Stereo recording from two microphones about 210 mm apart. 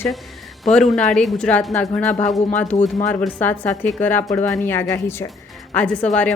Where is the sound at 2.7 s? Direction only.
35° left (ahead or behind).